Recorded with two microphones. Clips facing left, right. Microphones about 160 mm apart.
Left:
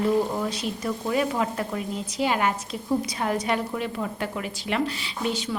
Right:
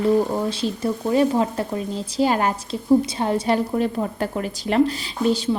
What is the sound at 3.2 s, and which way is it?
A woman's voice, 30° right (ahead or behind).